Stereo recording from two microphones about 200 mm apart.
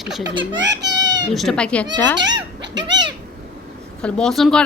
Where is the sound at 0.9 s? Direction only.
60° right (ahead or behind).